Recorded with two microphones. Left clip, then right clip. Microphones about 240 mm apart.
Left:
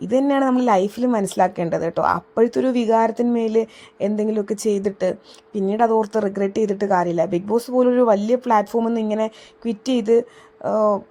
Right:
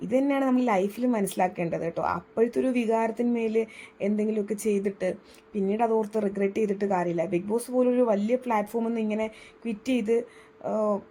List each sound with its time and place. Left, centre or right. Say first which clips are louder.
0.0 s a woman's voice: left 7 dB; left